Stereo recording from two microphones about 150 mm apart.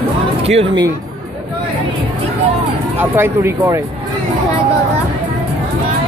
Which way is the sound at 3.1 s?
15° right (ahead or behind).